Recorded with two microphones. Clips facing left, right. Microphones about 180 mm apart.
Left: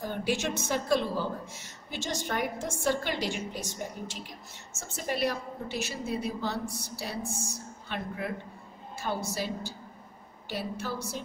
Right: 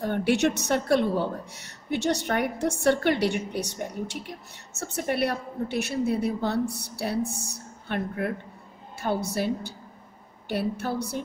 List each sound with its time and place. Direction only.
0.0 s a woman's voice: 65° right (ahead or behind)